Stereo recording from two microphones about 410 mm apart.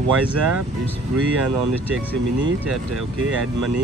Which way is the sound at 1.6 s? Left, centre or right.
Right.